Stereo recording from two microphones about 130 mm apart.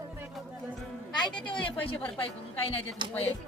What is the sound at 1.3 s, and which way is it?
Speech, 40° left (ahead or behind).